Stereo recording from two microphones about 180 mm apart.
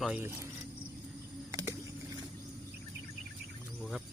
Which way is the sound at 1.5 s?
20° right (ahead or behind).